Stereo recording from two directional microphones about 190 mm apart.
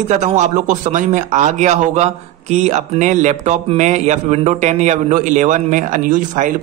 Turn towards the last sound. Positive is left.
turn(degrees=-45)  # may be behind; listen again after turning